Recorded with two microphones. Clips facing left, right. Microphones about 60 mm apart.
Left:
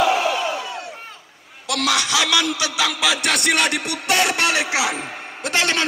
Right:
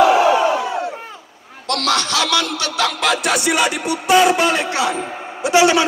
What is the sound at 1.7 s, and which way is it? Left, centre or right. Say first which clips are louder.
Music: right 2 dB; centre.